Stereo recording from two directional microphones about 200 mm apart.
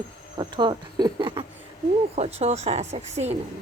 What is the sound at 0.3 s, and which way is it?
Speech, 25° right (ahead or behind).